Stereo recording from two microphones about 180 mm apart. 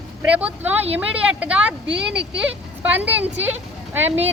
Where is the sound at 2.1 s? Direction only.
70° right (ahead or behind).